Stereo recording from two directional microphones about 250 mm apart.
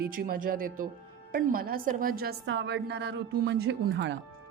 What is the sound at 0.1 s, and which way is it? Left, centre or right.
A woman's voice, right.